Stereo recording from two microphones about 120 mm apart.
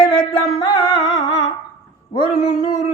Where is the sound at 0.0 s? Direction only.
40° left (ahead or behind).